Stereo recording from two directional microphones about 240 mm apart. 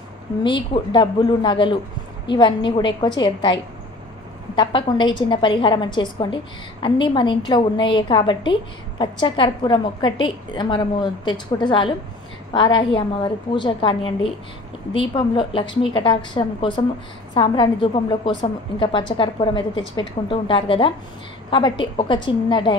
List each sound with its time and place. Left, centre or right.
0.4 s a woman's voice: centre